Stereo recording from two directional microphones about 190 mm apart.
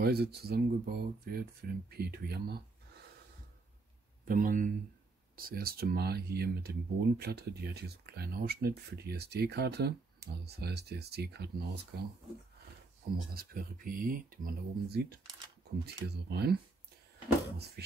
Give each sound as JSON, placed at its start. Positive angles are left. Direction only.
{"t": 0.0, "sound": "speech", "side_deg": -55}
{"t": 4.3, "sound": "speech", "side_deg": -45}
{"t": 13.3, "sound": "speech", "side_deg": -50}
{"t": 17.6, "sound": "speech", "side_deg": -60}